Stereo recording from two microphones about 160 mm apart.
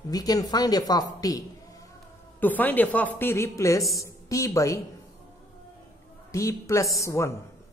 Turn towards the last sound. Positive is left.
turn(degrees=20)  # may be behind; listen again after turning